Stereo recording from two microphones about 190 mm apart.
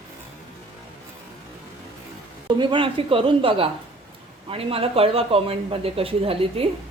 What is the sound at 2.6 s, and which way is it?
A woman's voice, 25° right (ahead or behind).